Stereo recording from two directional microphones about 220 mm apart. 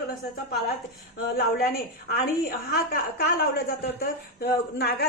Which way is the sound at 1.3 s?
45° left (ahead or behind).